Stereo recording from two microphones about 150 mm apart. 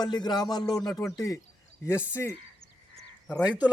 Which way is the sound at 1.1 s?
20° left (ahead or behind).